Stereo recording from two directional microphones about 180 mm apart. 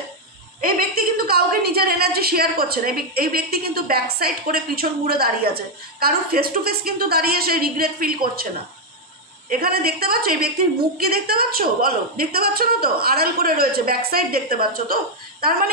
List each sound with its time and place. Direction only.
0.6 s a woman's voice: 55° right (ahead or behind)
9.5 s a woman's voice: 60° right (ahead or behind)